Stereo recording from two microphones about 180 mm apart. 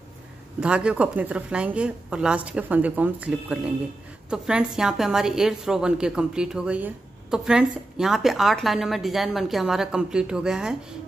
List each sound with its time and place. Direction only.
0.6 s a woman's voice: 5° right (ahead or behind)